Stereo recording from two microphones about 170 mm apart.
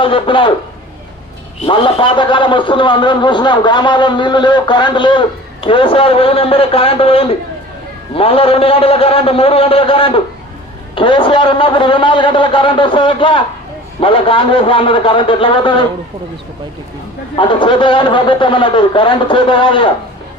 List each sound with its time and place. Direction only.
0.0 s a man's voice: 30° left (ahead or behind)
1.6 s a man's voice: 30° left (ahead or behind)
17.3 s a man's voice: 30° left (ahead or behind)